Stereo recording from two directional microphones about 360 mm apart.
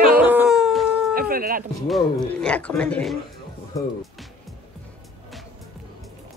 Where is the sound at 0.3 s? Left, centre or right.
Centre.